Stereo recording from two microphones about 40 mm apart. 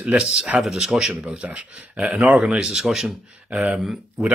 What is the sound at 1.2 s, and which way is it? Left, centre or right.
Speech, right.